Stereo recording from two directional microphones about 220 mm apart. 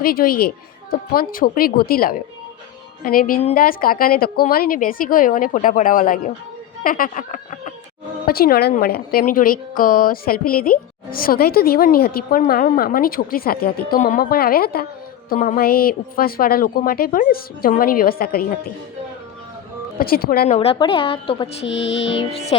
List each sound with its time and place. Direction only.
0.0 s a woman's voice: 40° left (ahead or behind)
20.0 s a woman's voice: 40° left (ahead or behind)
20.6 s speech: 25° left (ahead or behind)
21.7 s a woman's voice: 55° left (ahead or behind)